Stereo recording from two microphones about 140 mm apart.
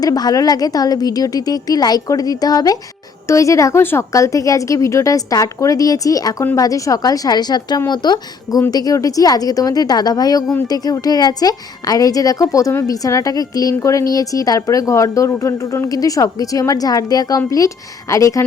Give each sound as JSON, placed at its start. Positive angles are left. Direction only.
{"t": 0.0, "sound": "a woman's voice", "side_deg": 25}